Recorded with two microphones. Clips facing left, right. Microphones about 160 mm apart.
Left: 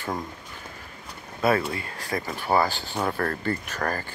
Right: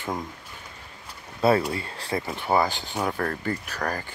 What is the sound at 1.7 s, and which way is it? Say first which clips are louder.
Speech: right 1 dB; 30° right (ahead or behind).